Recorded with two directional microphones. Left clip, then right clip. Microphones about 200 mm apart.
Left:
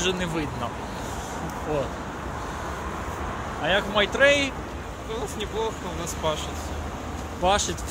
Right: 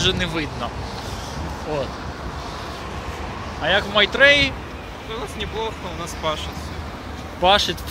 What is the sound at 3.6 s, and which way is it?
Speech, 30° right (ahead or behind).